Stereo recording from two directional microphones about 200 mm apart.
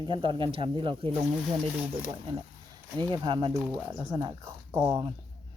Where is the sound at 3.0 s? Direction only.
20° right (ahead or behind).